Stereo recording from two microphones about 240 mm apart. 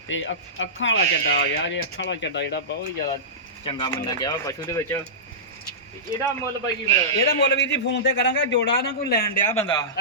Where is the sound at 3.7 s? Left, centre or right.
Centre.